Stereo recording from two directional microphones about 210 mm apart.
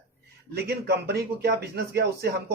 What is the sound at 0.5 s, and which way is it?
Speech, 50° right (ahead or behind).